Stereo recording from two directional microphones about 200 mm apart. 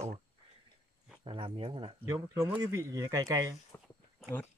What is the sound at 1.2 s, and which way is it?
Speech, 25° right (ahead or behind).